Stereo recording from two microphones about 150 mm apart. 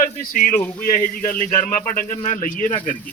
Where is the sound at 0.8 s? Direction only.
65° left (ahead or behind).